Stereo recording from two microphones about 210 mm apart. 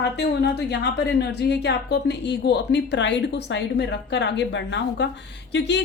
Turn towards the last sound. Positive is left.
turn(degrees=55)  # may be behind; listen again after turning